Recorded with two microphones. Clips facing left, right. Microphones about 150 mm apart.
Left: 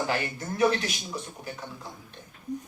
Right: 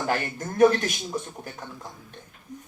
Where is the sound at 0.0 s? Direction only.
50° right (ahead or behind).